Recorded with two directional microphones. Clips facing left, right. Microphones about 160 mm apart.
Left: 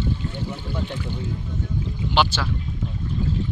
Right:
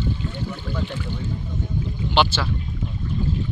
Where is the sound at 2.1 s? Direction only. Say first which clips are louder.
Right 1 dB; 5° left (ahead or behind).